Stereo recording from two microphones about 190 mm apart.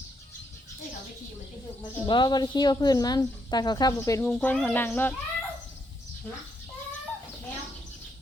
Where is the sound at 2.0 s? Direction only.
25° left (ahead or behind).